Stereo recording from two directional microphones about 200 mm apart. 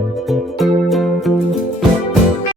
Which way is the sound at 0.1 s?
Centre (ahead or behind).